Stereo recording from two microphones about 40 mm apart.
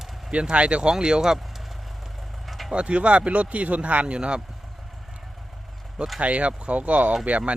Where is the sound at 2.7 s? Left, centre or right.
Right.